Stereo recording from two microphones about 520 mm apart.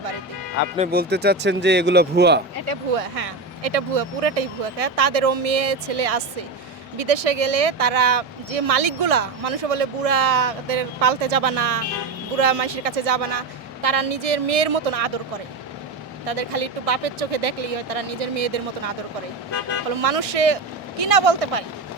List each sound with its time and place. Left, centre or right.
0.8 s speech: centre
2.6 s speech: right
16.2 s speech: right
20.0 s speech: right